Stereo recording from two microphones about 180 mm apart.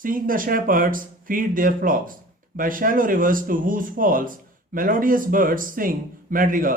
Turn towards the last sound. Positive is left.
turn(degrees=-50)  # may be behind; listen again after turning